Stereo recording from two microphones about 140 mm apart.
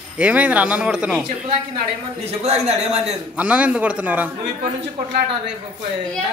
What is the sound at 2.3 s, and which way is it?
Speech, 50° right (ahead or behind).